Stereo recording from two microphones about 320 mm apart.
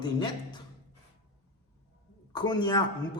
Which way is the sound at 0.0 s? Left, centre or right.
Centre.